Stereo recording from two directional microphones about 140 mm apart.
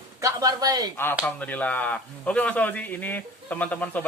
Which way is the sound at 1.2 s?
10° left (ahead or behind).